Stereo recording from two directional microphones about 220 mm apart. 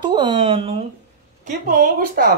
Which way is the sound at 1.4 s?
35° right (ahead or behind).